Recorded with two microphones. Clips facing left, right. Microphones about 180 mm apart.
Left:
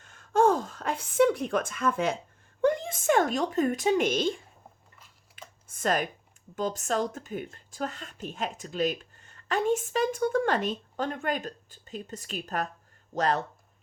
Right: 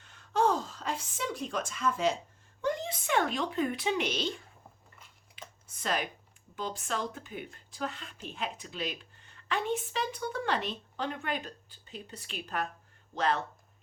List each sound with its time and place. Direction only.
0.0 s a sound: 45° left (ahead or behind)
2.6 s speech: 55° left (ahead or behind)
5.6 s speech: 50° left (ahead or behind)